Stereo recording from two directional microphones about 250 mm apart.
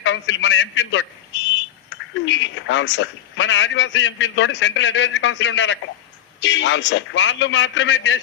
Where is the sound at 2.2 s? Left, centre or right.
Left.